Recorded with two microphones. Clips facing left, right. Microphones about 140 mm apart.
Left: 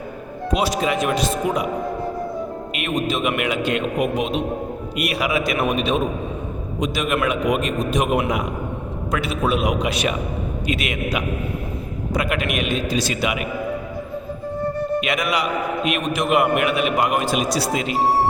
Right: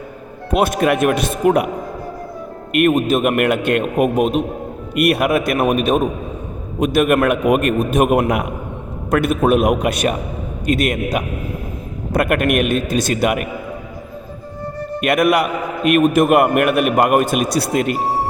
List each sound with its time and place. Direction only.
0.5 s speech: 55° right (ahead or behind)
2.7 s a man's voice: 50° right (ahead or behind)
15.0 s a man's voice: 55° right (ahead or behind)